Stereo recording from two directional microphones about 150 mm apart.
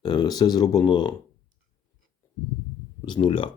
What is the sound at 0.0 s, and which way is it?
Speech, 25° left (ahead or behind).